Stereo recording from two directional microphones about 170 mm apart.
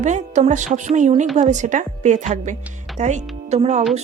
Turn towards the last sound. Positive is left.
turn(degrees=-40)  # may be behind; listen again after turning